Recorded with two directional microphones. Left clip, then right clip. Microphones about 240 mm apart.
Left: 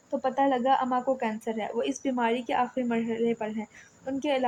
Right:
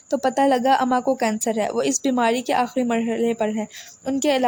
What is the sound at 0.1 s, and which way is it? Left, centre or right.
Speech, right.